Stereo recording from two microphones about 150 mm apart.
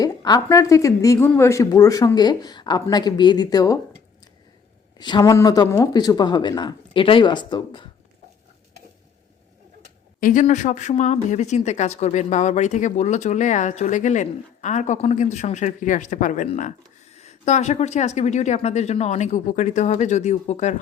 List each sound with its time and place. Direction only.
0.0 s a sound: 25° left (ahead or behind)
0.4 s speech: 20° left (ahead or behind)
4.9 s speech: 30° left (ahead or behind)
10.2 s speech: 60° left (ahead or behind)